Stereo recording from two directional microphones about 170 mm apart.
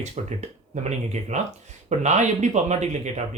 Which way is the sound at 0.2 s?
40° right (ahead or behind).